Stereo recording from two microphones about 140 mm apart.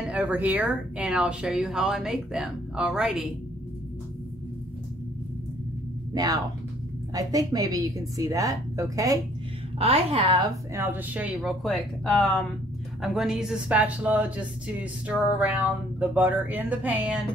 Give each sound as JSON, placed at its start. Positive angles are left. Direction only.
{"t": 0.1, "sound": "speech", "side_deg": -10}
{"t": 6.1, "sound": "a woman's voice", "side_deg": -25}
{"t": 9.8, "sound": "a woman's voice", "side_deg": -45}
{"t": 10.7, "sound": "speech", "side_deg": -15}
{"t": 11.4, "sound": "speech", "side_deg": 0}